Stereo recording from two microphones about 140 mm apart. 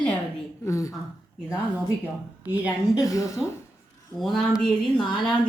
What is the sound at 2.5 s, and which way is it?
Speech, 10° right (ahead or behind).